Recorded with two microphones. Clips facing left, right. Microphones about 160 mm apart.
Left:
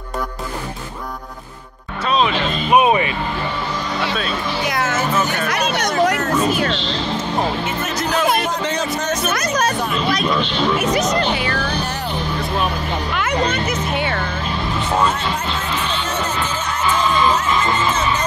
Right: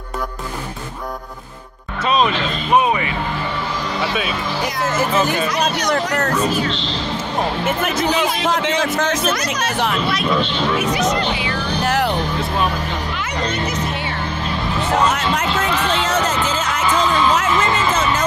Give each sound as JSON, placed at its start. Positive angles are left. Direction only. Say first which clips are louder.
{"t": 2.7, "sound": "vehicle", "louder": "left 2 dB", "side_deg": 20}
{"t": 5.5, "sound": "speech", "louder": "right 1 dB", "side_deg": 60}
{"t": 7.9, "sound": "speech", "louder": "left 1 dB", "side_deg": 0}
{"t": 8.5, "sound": "a man's voice", "louder": "right 3 dB", "side_deg": -90}
{"t": 11.8, "sound": "vehicle", "louder": "right 7 dB", "side_deg": -90}
{"t": 13.1, "sound": "speech", "louder": "left 4 dB", "side_deg": 55}
{"t": 15.0, "sound": "music", "louder": "right 2 dB", "side_deg": -85}